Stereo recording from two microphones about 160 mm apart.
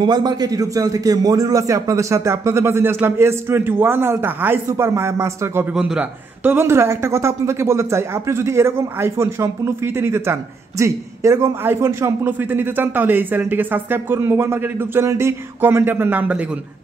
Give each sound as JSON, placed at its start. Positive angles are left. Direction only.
{"t": 0.0, "sound": "a man's voice", "side_deg": -25}